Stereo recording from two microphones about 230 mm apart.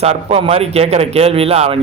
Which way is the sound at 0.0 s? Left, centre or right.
Right.